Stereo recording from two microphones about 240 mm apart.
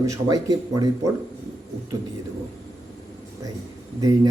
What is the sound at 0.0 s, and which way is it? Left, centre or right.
A man's voice, centre.